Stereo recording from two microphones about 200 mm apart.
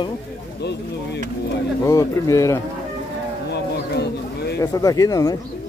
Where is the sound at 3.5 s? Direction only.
55° left (ahead or behind).